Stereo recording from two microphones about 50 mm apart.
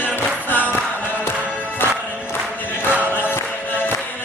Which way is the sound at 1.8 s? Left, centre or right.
Left.